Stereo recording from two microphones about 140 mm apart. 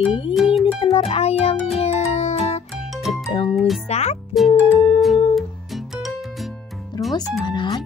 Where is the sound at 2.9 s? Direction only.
Centre (ahead or behind).